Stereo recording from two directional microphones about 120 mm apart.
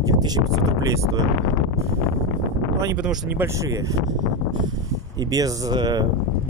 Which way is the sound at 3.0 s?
5° right (ahead or behind).